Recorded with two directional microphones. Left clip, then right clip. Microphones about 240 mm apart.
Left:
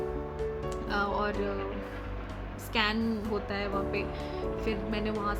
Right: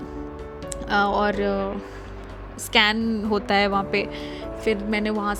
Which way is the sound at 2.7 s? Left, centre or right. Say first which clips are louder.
Right 10 dB; right.